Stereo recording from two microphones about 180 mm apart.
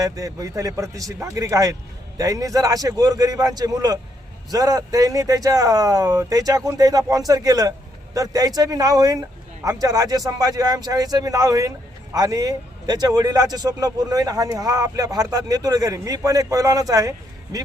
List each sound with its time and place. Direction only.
0.0 s a man's voice: 20° right (ahead or behind)